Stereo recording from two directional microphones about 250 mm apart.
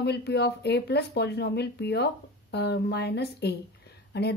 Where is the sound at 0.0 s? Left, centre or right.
Left.